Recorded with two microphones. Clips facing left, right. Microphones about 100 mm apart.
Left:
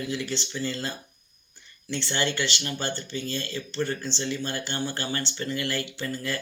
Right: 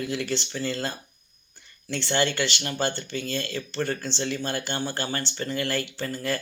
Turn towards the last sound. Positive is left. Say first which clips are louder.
# right 2 dB
turn(degrees=-45)  # may be behind; listen again after turning